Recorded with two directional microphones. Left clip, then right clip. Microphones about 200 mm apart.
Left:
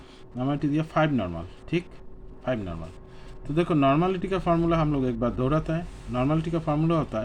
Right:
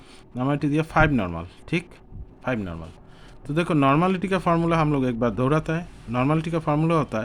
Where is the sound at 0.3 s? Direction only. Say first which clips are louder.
Right 3 dB; 45° right (ahead or behind).